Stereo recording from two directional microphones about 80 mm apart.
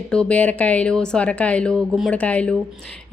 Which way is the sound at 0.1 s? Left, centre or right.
Centre.